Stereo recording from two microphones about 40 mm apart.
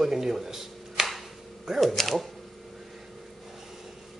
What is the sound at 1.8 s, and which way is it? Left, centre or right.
Speech, centre.